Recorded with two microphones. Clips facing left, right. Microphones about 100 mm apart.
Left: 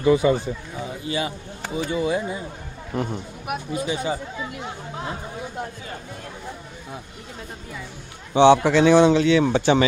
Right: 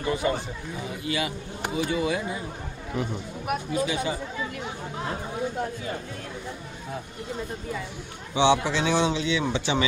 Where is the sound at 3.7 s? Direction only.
30° left (ahead or behind).